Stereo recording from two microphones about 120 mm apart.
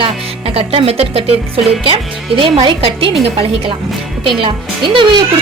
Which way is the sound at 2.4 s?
45° right (ahead or behind).